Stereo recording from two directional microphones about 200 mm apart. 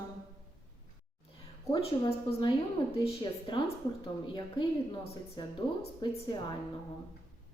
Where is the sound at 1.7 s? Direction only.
30° left (ahead or behind).